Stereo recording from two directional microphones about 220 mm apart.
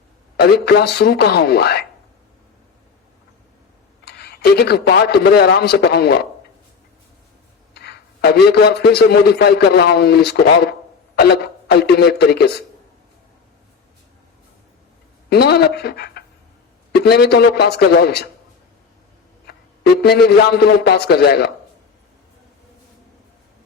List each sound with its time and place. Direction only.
0.3 s a man's voice: 50° left (ahead or behind)
4.0 s a man's voice: 50° left (ahead or behind)
7.7 s a man's voice: 50° left (ahead or behind)
15.3 s a man's voice: 45° left (ahead or behind)
19.5 s a man's voice: 45° left (ahead or behind)